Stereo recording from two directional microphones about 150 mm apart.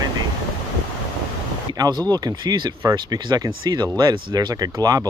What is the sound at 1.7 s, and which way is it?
Speech, 25° right (ahead or behind).